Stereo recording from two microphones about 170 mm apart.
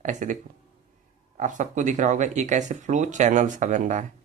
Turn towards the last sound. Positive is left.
turn(degrees=-50)  # may be behind; listen again after turning